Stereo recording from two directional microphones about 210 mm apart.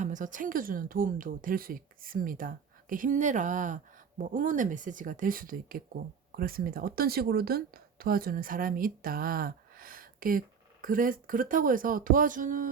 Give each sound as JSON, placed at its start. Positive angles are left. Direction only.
{"t": 0.0, "sound": "a woman's voice", "side_deg": -35}